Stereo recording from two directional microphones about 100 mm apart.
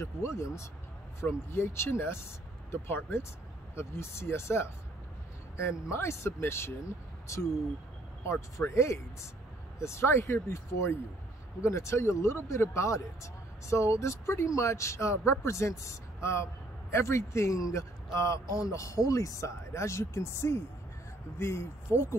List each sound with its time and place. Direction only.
0.0 s speech: 30° left (ahead or behind)